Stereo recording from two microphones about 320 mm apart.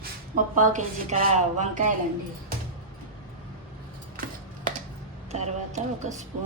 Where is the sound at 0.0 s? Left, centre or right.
Right.